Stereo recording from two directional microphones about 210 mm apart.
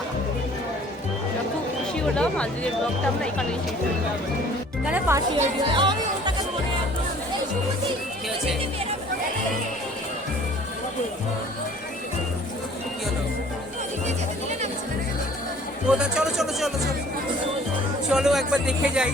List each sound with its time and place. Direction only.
2.1 s speech: 5° left (ahead or behind)
4.9 s speech: 10° right (ahead or behind)
5.4 s speech: 20° right (ahead or behind)
15.9 s speech: 5° right (ahead or behind)
18.1 s speech: centre (ahead or behind)